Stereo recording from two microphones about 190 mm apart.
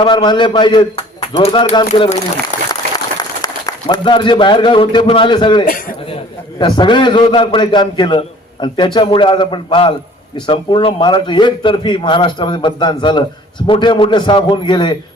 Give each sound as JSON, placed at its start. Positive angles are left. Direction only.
{"t": 0.0, "sound": "a man's voice", "side_deg": 25}
{"t": 1.9, "sound": "speech", "side_deg": 35}
{"t": 3.2, "sound": "a man's voice", "side_deg": 20}
{"t": 5.6, "sound": "a man's voice", "side_deg": 50}
{"t": 6.6, "sound": "a man's voice", "side_deg": 25}